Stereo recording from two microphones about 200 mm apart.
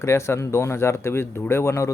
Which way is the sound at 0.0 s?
15° left (ahead or behind).